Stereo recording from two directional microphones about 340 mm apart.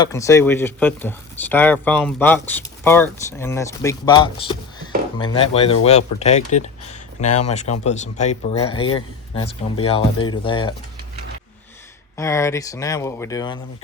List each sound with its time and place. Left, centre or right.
0.0 s speech: centre
12.1 s speech: centre